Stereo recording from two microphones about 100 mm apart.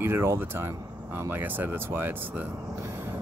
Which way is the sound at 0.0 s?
25° right (ahead or behind).